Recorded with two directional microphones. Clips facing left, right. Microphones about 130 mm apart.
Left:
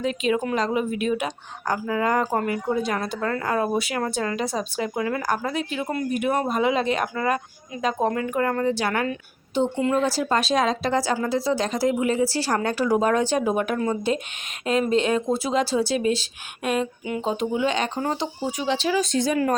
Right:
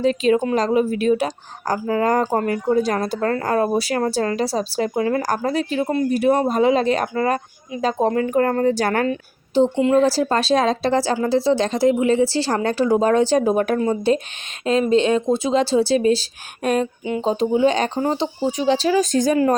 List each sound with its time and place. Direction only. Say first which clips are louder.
0.0 s a woman's voice: right 6 dB; 35° right (ahead or behind)
9.6 s a woman's voice: right 6 dB; 30° right (ahead or behind)